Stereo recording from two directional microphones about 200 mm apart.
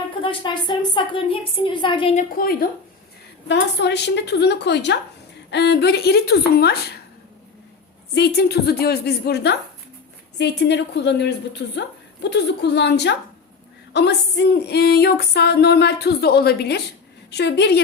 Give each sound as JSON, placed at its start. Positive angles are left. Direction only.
{"t": 0.2, "sound": "a woman's voice", "side_deg": 25}
{"t": 2.1, "sound": "speech", "side_deg": 45}
{"t": 3.5, "sound": "music", "side_deg": 60}
{"t": 5.5, "sound": "speech", "side_deg": 60}
{"t": 8.1, "sound": "music", "side_deg": 55}